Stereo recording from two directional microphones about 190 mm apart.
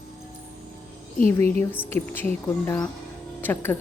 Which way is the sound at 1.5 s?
10° left (ahead or behind).